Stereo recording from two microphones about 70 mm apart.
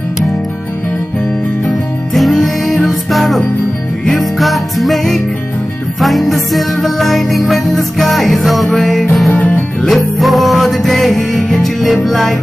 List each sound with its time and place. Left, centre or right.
2.1 s music: centre
9.3 s music: centre
9.8 s music: centre